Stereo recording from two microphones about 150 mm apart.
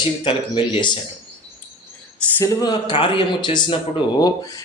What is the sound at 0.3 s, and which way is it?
Speech, 35° left (ahead or behind).